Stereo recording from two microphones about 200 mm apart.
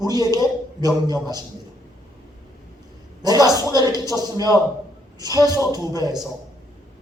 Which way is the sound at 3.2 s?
20° right (ahead or behind).